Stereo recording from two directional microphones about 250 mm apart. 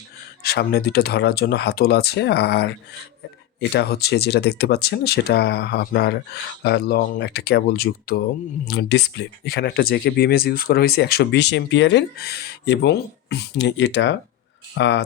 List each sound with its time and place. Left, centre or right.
0.4 s speech: left